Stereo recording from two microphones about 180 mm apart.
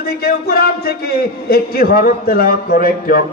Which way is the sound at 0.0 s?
60° left (ahead or behind).